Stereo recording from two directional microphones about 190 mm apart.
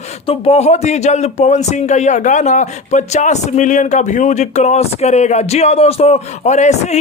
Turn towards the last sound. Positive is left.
turn(degrees=40)  # may be behind; listen again after turning